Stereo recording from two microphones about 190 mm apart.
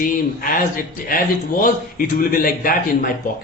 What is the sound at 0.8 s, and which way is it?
A man's voice, 45° left (ahead or behind).